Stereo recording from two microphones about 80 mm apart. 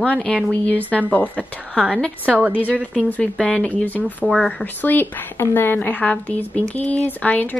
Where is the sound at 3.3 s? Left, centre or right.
Centre.